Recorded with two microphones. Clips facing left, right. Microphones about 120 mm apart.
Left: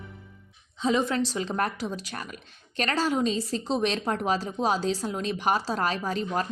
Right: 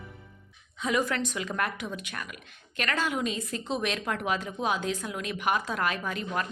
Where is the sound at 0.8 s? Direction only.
25° left (ahead or behind).